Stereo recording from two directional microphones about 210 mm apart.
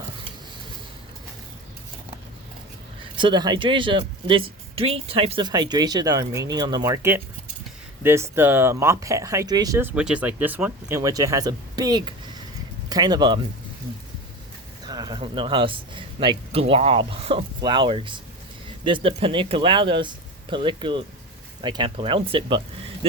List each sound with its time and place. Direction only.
3.0 s speech: 25° right (ahead or behind)
14.8 s a man's voice: 20° right (ahead or behind)